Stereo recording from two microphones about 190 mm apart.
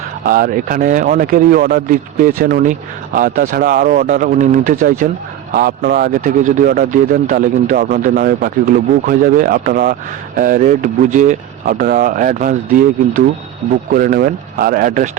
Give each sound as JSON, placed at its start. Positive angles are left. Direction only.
{"t": 0.3, "sound": "speech", "side_deg": -50}
{"t": 13.9, "sound": "speech", "side_deg": -50}